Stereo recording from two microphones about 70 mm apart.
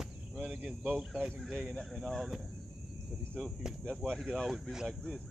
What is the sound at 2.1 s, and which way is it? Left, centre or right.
Speech, centre.